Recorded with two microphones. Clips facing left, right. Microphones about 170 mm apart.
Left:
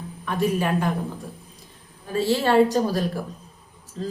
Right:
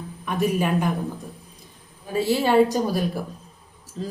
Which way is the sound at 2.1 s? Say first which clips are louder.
Even; 10° right (ahead or behind).